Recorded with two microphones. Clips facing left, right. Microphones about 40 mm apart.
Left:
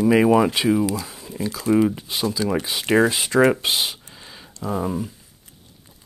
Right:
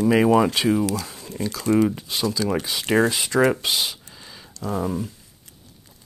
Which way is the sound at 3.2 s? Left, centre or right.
Left.